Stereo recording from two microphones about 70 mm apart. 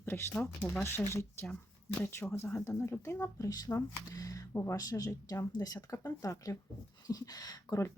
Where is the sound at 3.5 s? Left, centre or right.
Left.